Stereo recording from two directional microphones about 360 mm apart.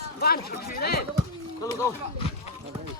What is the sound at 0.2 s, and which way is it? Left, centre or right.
Speech, left.